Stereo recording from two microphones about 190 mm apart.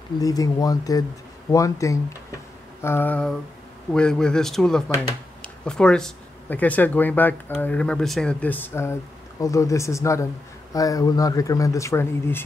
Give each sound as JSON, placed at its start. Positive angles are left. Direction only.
{"t": 0.2, "sound": "speech", "side_deg": 20}